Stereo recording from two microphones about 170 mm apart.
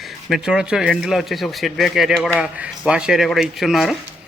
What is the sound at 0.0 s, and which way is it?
A man's voice, centre (ahead or behind).